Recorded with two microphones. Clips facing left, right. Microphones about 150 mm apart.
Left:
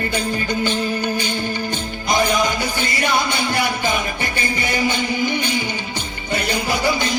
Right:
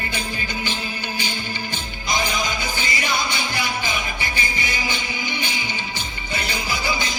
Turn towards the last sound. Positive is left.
turn(degrees=60)  # may be behind; listen again after turning